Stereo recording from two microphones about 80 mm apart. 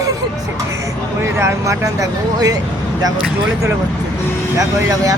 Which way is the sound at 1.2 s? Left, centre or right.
Right.